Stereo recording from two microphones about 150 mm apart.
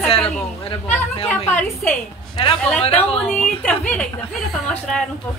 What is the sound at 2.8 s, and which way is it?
Speech, 40° left (ahead or behind).